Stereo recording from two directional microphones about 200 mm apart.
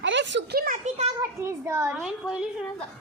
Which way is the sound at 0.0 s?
65° right (ahead or behind).